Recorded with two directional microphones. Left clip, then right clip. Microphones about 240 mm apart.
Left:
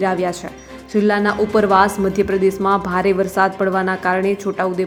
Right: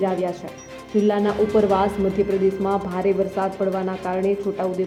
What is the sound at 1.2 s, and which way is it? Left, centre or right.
Speech, left.